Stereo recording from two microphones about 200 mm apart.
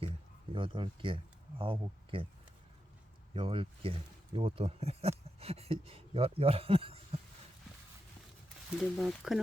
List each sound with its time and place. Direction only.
0.5 s speech: 25° right (ahead or behind)
3.3 s speech: 25° right (ahead or behind)
9.0 s speech: centre (ahead or behind)